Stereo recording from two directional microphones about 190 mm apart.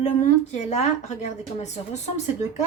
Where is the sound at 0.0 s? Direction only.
40° left (ahead or behind).